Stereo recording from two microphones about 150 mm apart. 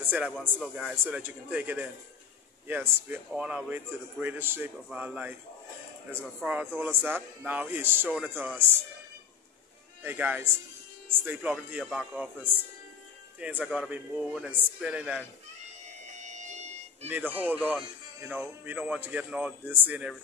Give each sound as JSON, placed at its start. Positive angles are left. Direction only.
{"t": 0.0, "sound": "a sound", "side_deg": -10}
{"t": 0.4, "sound": "a man's voice", "side_deg": 0}
{"t": 6.4, "sound": "speech", "side_deg": -10}
{"t": 10.0, "sound": "a man's voice", "side_deg": -10}
{"t": 16.2, "sound": "music", "side_deg": -50}
{"t": 17.3, "sound": "speech", "side_deg": -10}